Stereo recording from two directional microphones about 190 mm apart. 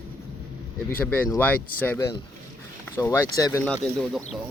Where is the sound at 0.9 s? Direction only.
10° left (ahead or behind).